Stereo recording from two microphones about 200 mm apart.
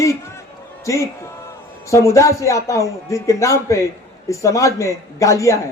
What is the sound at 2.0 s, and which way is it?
A man's voice, 15° left (ahead or behind).